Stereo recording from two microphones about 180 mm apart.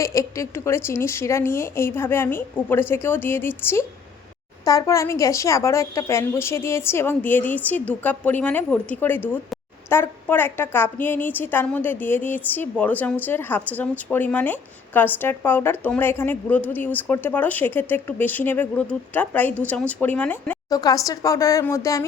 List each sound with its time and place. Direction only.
0.0 s a woman's voice: 15° left (ahead or behind)
20.7 s a woman's voice: 20° left (ahead or behind)